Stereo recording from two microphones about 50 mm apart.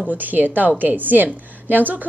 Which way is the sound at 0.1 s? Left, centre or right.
Right.